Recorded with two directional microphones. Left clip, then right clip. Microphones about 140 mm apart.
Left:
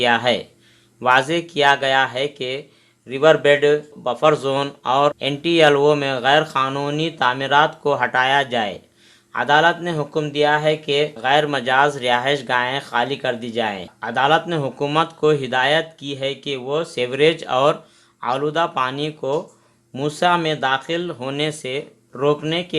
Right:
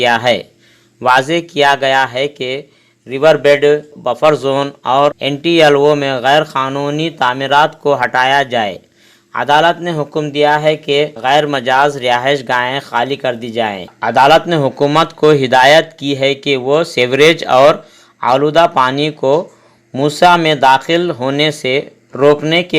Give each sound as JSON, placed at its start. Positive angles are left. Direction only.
{"t": 0.0, "sound": "speech", "side_deg": -40}
{"t": 6.6, "sound": "speech", "side_deg": -25}